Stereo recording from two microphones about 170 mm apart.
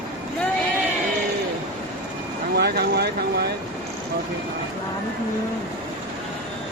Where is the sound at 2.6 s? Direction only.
70° right (ahead or behind).